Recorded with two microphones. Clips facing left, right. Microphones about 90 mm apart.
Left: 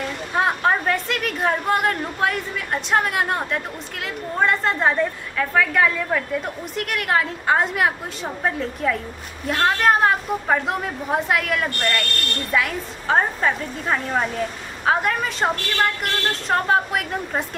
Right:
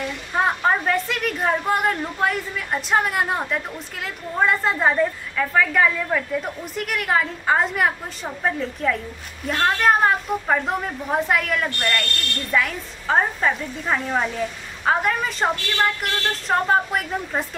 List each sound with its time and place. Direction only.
0.3 s a woman's voice: centre (ahead or behind)